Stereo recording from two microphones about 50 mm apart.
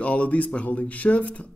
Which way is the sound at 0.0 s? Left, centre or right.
Left.